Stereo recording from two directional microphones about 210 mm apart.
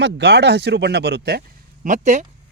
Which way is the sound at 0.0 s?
50° right (ahead or behind).